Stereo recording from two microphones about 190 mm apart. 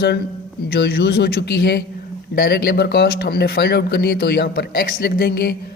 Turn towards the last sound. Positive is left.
turn(degrees=55)  # may be behind; listen again after turning